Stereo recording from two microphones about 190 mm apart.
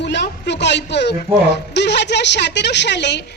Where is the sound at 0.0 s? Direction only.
65° left (ahead or behind).